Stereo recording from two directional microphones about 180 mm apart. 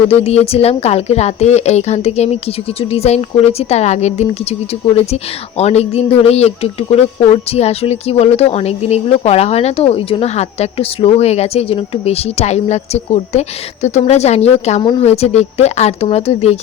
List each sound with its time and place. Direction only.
0.1 s speech: 35° left (ahead or behind)